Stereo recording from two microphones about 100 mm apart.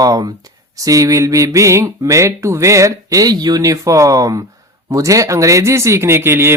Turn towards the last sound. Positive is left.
turn(degrees=-25)  # may be behind; listen again after turning